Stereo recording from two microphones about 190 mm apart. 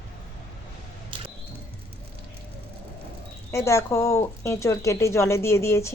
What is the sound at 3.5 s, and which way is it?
A woman's voice, 15° left (ahead or behind).